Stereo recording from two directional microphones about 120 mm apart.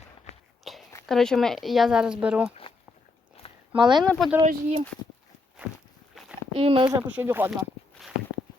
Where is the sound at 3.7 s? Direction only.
40° right (ahead or behind).